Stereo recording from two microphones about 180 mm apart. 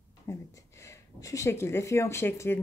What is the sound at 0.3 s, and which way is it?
Speech, 15° left (ahead or behind).